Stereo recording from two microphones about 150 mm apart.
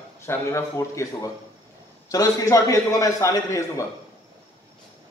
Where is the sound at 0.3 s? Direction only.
20° left (ahead or behind).